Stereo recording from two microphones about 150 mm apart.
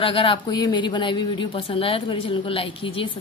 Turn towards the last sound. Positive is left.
turn(degrees=35)  # may be behind; listen again after turning